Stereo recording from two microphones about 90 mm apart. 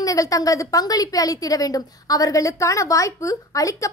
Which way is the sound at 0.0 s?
40° left (ahead or behind).